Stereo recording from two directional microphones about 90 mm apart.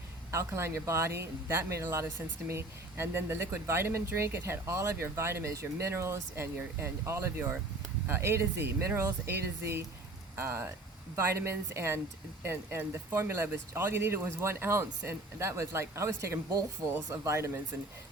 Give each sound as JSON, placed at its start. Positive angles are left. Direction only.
{"t": 0.3, "sound": "speech", "side_deg": -30}